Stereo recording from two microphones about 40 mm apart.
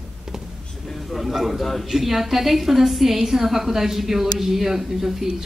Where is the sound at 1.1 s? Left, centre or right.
Centre.